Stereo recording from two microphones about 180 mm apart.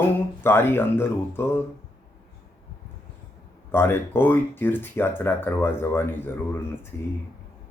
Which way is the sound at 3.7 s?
10° left (ahead or behind).